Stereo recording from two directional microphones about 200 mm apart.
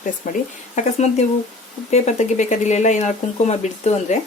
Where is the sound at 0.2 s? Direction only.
35° left (ahead or behind).